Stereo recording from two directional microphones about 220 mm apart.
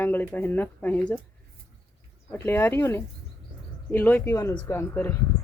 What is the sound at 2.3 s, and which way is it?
Speech, 10° left (ahead or behind).